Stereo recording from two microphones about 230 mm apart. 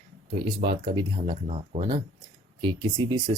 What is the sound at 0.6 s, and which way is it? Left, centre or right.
Speech, right.